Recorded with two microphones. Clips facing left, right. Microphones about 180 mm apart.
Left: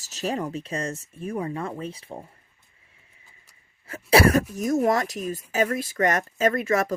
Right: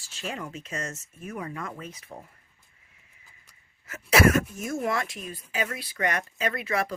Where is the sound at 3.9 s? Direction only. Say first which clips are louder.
Left 3 dB; 30° left (ahead or behind).